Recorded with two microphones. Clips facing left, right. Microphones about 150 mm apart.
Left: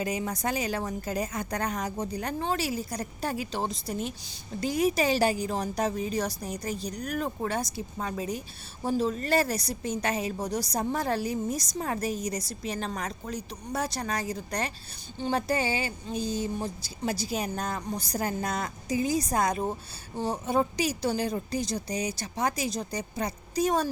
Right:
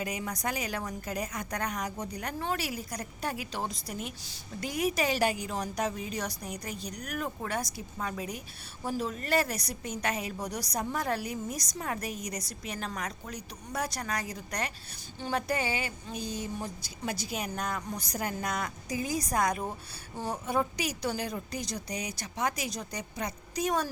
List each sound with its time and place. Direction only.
0.0 s a woman's voice: 30° left (ahead or behind)